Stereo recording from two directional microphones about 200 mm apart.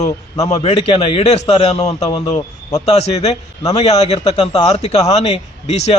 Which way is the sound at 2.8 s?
30° left (ahead or behind).